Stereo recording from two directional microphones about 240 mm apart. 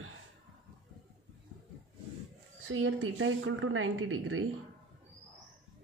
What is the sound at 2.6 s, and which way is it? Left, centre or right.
Speech, right.